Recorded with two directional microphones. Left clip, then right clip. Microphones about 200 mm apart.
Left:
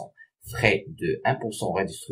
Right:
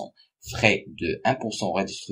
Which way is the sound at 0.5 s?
35° right (ahead or behind).